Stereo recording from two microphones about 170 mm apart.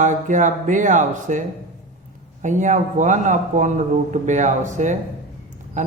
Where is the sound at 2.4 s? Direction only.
45° right (ahead or behind).